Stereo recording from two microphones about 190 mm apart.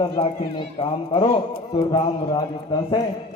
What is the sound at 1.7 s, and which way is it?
Speech, 20° left (ahead or behind).